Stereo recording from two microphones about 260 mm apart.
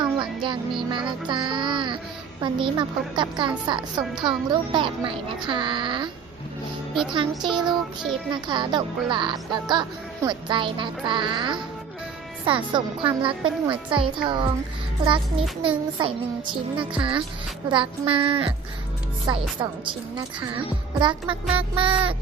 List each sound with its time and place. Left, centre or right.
0.0 s music: centre
0.8 s a child's voice: centre
7.4 s child singing: centre
8.3 s a child's voice: centre